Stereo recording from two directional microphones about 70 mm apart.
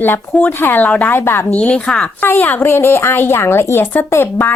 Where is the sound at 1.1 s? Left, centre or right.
Left.